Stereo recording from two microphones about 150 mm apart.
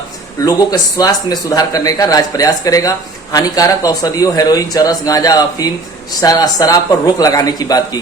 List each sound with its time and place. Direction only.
0.4 s speech: 25° left (ahead or behind)